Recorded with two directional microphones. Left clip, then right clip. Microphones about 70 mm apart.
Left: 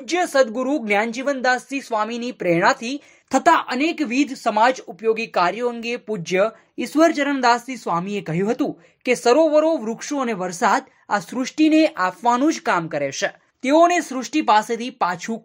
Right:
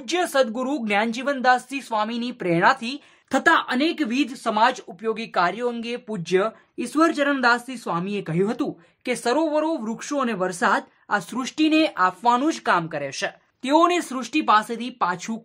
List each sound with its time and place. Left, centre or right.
0.1 s speech: centre; by 9.9 s left
10.0 s speech: centre
10.4 s speech: left
11.3 s speech: centre; by 13.3 s left
13.6 s speech: left